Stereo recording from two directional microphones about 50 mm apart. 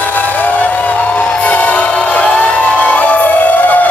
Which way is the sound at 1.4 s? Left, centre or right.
Left.